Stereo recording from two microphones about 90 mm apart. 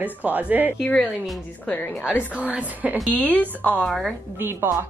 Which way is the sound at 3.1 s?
15° left (ahead or behind).